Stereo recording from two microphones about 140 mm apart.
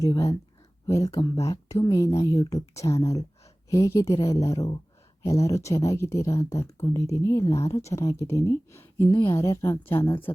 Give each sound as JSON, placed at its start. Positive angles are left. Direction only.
{"t": 0.0, "sound": "speech", "side_deg": 25}